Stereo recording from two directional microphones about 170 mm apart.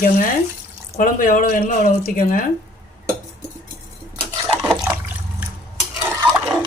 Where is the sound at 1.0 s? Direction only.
55° left (ahead or behind).